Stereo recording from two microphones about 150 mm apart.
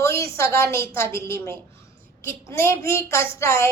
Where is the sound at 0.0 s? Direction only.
20° left (ahead or behind).